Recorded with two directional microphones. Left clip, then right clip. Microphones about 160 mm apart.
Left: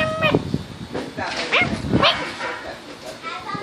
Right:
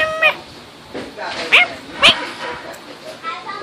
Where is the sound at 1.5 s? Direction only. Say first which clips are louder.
Right 8 dB; 15° right (ahead or behind).